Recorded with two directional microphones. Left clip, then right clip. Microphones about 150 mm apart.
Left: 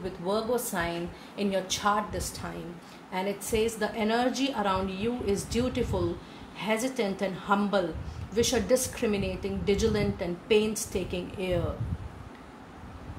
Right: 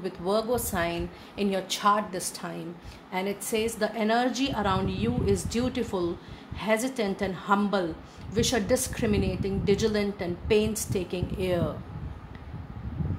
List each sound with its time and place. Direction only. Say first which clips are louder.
0.0 s a woman's voice: right 3 dB; 55° right (ahead or behind)